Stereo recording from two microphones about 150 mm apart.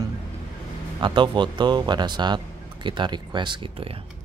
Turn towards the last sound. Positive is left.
turn(degrees=-40)  # may be behind; listen again after turning